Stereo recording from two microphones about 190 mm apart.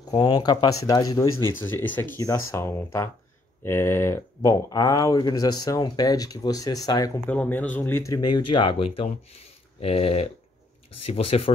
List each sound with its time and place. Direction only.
0.1 s speech: 20° left (ahead or behind)